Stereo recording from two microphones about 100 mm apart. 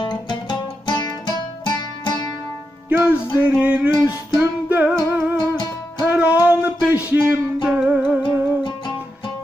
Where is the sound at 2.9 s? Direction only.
15° right (ahead or behind).